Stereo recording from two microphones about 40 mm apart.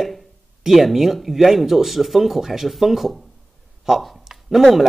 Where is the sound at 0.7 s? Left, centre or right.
Centre.